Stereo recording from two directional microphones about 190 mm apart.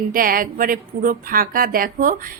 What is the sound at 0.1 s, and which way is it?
A woman's voice, 50° right (ahead or behind).